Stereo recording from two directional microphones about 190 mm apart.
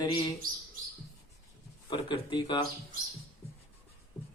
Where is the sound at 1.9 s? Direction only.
25° left (ahead or behind).